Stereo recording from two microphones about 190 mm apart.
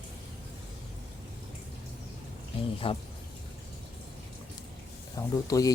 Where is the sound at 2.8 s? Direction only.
30° left (ahead or behind).